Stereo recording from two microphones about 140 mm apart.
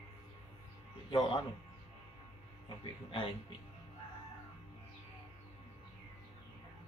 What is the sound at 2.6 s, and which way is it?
Speech, 35° left (ahead or behind).